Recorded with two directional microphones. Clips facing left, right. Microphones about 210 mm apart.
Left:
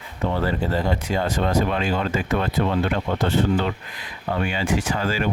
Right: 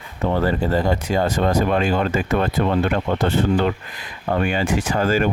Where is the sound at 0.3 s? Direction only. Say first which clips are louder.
Right 4 dB; 45° right (ahead or behind).